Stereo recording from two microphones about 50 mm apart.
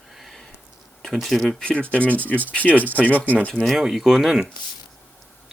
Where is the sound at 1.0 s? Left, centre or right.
Centre.